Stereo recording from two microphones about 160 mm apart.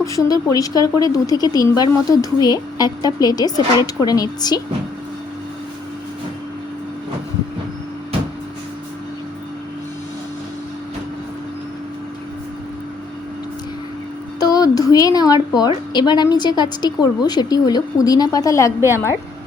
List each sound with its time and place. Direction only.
0.0 s speech: 20° left (ahead or behind)
14.3 s a woman's voice: 25° left (ahead or behind)